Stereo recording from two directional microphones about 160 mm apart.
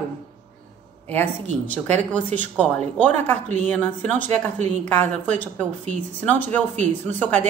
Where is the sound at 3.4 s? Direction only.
45° right (ahead or behind).